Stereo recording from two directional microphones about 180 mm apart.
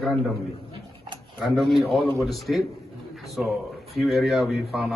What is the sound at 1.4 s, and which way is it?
A man's voice, centre (ahead or behind).